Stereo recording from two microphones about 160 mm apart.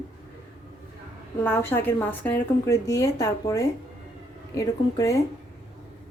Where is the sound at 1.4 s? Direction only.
10° left (ahead or behind).